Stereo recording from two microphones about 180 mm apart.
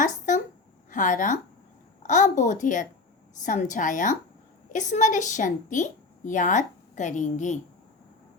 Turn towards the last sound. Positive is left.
turn(degrees=40)  # may be behind; listen again after turning